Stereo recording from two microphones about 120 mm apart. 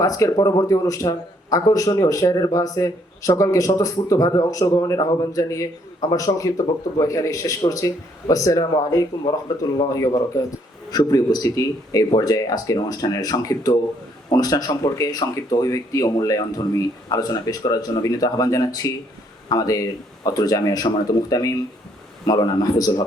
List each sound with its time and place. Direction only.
0.0 s speech: 30° left (ahead or behind)